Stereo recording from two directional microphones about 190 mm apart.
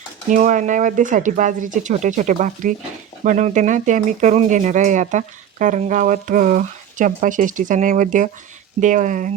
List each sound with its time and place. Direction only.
0.3 s speech: 40° right (ahead or behind)